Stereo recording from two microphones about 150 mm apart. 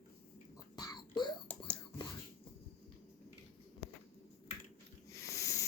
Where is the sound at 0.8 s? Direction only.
25° left (ahead or behind).